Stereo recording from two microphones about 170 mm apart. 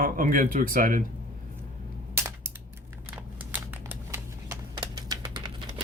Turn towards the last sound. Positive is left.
turn(degrees=-25)  # may be behind; listen again after turning